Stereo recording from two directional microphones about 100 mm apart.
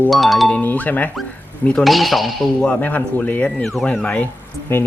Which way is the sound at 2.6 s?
15° left (ahead or behind).